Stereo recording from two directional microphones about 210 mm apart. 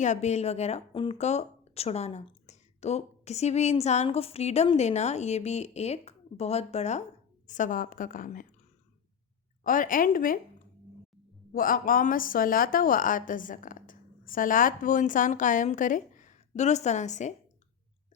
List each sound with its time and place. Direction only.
0.0 s a woman's voice: 35° left (ahead or behind)
9.6 s a woman's voice: 40° left (ahead or behind)
11.5 s a woman's voice: 40° left (ahead or behind)